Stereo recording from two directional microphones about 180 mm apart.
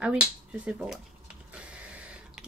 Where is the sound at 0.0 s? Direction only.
5° right (ahead or behind).